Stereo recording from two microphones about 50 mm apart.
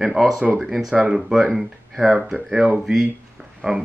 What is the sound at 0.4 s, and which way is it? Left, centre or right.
Speech, centre.